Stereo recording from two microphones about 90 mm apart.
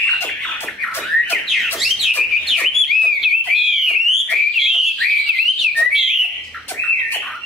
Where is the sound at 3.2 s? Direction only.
5° right (ahead or behind).